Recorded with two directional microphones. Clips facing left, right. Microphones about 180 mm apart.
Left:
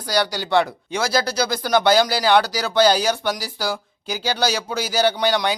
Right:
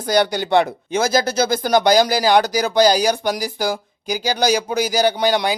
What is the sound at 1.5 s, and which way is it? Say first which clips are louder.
Speech: right 3 dB; 45° right (ahead or behind).